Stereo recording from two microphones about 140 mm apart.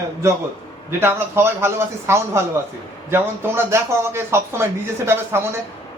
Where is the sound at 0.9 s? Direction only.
15° right (ahead or behind).